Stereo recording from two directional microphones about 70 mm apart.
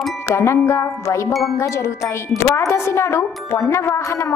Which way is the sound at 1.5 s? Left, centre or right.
Left.